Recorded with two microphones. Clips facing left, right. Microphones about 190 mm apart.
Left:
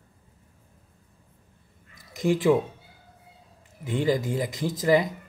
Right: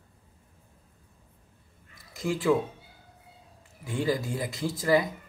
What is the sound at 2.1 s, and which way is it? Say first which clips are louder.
Speech: left 4 dB; 20° left (ahead or behind).